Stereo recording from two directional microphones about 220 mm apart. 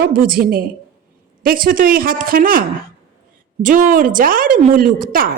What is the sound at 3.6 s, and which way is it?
Speech, 35° right (ahead or behind).